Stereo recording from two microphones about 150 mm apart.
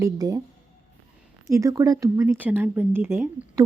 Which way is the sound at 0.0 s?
25° right (ahead or behind).